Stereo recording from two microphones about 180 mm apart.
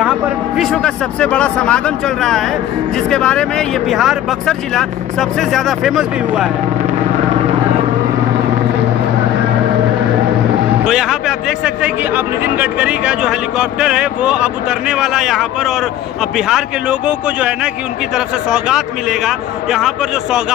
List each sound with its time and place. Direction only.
0.6 s speech: centre (ahead or behind)
3.1 s speech: 5° left (ahead or behind)
10.9 s speech: centre (ahead or behind)